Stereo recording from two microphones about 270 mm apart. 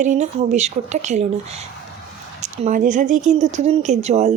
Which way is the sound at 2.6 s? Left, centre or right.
Right.